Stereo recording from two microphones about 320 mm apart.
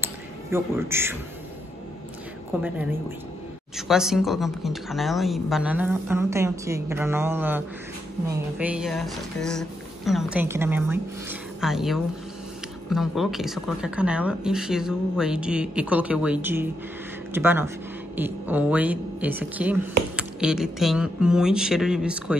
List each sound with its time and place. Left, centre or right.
0.0 s a sound: centre
2.5 s speech: centre
3.7 s speech: centre